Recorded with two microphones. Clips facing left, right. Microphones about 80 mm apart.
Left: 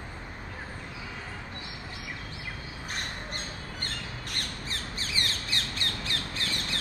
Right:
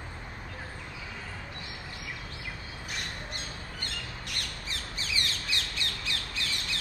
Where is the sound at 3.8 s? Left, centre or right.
Left.